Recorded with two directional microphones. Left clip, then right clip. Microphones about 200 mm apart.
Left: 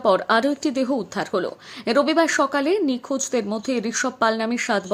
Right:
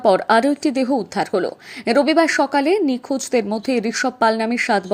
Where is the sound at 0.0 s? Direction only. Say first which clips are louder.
Right 4 dB; 15° right (ahead or behind).